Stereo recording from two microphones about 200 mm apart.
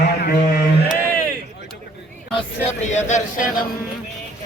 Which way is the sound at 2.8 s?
35° left (ahead or behind).